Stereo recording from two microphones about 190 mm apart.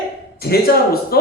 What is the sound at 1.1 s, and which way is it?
Speech, 55° left (ahead or behind).